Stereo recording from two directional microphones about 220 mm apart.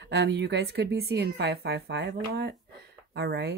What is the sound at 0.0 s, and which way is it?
A woman's voice, 50° right (ahead or behind).